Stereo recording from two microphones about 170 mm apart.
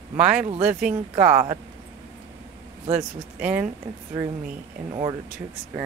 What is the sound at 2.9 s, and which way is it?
Speech, 10° right (ahead or behind).